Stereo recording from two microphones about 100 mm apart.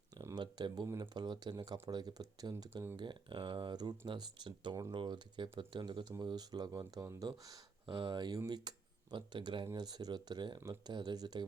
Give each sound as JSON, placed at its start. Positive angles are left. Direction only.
{"t": 0.1, "sound": "a sound", "side_deg": -40}
{"t": 1.1, "sound": "speech", "side_deg": -50}
{"t": 7.9, "sound": "speech", "side_deg": -55}